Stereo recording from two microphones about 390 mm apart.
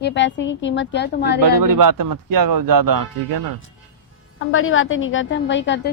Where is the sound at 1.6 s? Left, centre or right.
Right.